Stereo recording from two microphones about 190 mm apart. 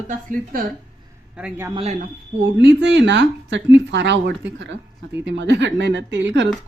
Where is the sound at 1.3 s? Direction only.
5° right (ahead or behind).